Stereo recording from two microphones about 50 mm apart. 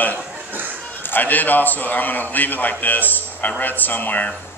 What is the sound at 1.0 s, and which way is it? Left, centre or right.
Speech, left.